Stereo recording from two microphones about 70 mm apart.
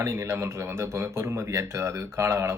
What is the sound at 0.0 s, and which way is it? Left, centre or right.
Speech, right.